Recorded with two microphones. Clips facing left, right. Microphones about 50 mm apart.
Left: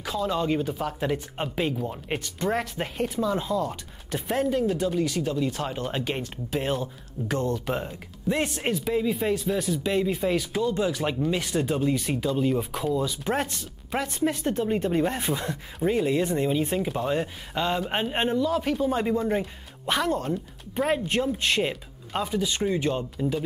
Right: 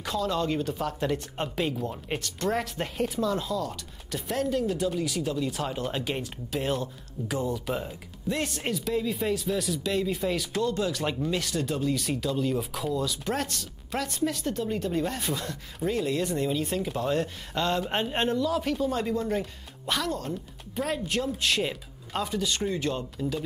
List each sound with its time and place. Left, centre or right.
0.2 s speech: centre
4.5 s speech: centre
7.3 s speech: centre
7.6 s speech: centre